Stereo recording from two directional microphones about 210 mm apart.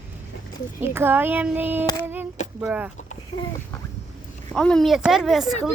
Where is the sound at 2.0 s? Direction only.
10° right (ahead or behind).